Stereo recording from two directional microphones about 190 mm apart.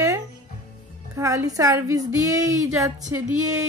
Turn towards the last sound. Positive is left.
turn(degrees=-15)  # may be behind; listen again after turning